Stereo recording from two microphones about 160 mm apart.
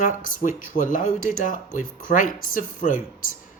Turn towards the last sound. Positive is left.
turn(degrees=55)  # may be behind; listen again after turning